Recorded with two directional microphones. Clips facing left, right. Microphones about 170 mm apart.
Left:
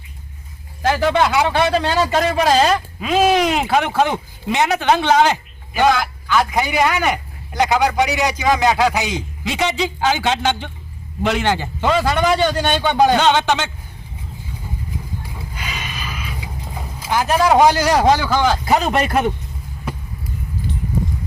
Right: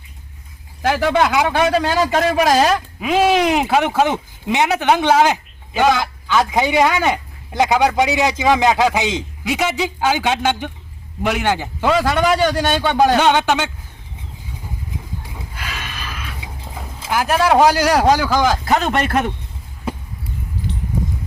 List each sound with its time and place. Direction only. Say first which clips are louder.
0.8 s a man's voice: even; 5° right (ahead or behind)
6.0 s a man's voice: right 1 dB; 25° right (ahead or behind)
9.4 s a man's voice: even; 10° right (ahead or behind)
15.5 s a sound: left 1 dB; centre (ahead or behind)
17.1 s a man's voice: even; 5° right (ahead or behind)
18.6 s a man's voice: left 1 dB; 5° left (ahead or behind)